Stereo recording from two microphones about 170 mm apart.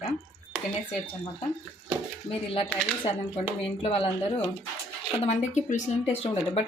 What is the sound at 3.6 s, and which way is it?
Speech, 35° left (ahead or behind).